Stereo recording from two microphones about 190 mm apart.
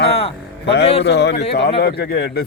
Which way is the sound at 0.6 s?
65° left (ahead or behind).